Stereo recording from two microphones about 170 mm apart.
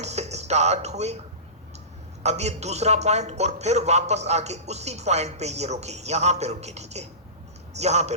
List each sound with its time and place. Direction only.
0.0 s music: 40° right (ahead or behind)
2.2 s a man's voice: 40° right (ahead or behind)